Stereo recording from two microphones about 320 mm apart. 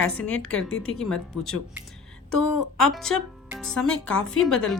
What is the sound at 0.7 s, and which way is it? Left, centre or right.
Speech, left.